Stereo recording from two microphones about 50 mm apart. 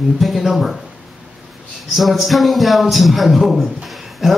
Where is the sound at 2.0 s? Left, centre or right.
Centre.